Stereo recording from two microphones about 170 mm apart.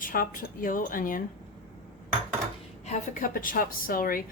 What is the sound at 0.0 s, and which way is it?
A woman's voice, 55° left (ahead or behind).